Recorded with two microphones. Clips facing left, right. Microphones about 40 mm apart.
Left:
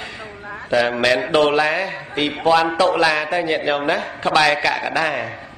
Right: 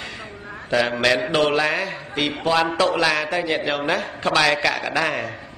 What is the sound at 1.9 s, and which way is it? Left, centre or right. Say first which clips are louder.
Speech: left 2 dB; left.